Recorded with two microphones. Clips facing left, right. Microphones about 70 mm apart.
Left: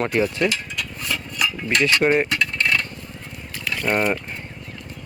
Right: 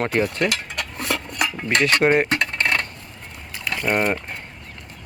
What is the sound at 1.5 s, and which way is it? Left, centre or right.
Cutlery, right.